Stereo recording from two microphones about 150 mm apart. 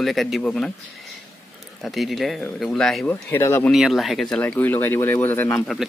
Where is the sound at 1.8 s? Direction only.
Centre (ahead or behind).